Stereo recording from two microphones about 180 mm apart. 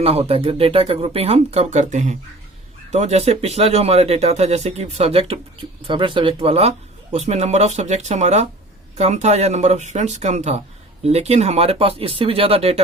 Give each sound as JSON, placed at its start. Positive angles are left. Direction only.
{"t": 0.0, "sound": "speech", "side_deg": -35}